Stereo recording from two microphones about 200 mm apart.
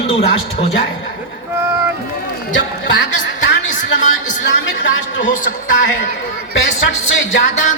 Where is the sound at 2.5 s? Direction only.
60° left (ahead or behind).